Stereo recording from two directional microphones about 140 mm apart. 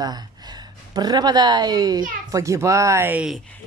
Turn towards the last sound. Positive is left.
turn(degrees=-15)  # may be behind; listen again after turning